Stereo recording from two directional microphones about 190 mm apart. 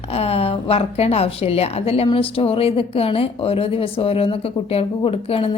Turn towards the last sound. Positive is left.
turn(degrees=30)  # may be behind; listen again after turning